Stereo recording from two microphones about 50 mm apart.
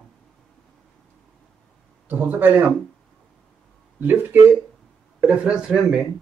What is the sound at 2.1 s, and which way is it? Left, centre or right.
Speech, right.